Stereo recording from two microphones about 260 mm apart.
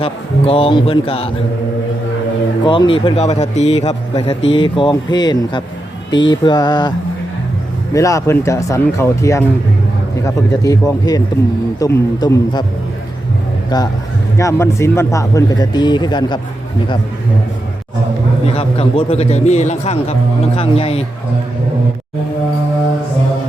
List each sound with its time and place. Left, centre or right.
0.0 s a man's voice: left
2.6 s a man's voice: centre
7.9 s speech: centre
13.7 s speech: centre
18.4 s a man's voice: left